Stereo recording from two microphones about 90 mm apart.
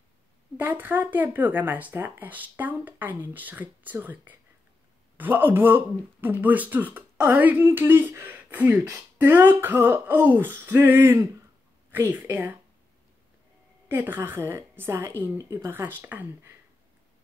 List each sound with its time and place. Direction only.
0.6 s speech: 20° right (ahead or behind)
13.8 s speech: 20° right (ahead or behind)